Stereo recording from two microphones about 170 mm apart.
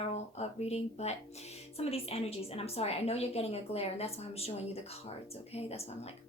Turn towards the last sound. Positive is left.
turn(degrees=35)  # may be behind; listen again after turning